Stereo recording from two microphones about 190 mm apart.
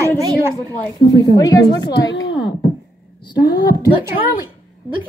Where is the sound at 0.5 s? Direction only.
20° left (ahead or behind).